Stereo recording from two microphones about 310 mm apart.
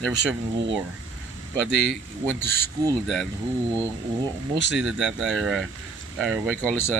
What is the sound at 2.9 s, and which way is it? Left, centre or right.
Speech, centre.